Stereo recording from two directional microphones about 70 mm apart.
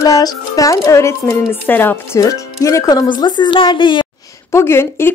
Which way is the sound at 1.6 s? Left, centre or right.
Left.